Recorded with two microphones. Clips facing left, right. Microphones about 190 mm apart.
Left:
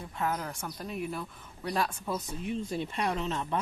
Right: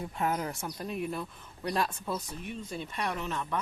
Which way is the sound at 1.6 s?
5° left (ahead or behind).